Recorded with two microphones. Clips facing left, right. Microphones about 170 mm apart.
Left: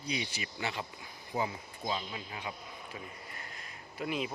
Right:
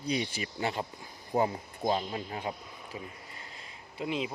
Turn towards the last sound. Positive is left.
turn(degrees=-20)  # may be behind; listen again after turning